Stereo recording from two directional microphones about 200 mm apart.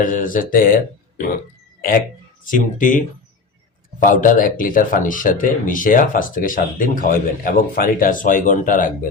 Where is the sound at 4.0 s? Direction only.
40° left (ahead or behind).